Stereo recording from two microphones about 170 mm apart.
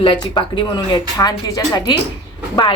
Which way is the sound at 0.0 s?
30° left (ahead or behind).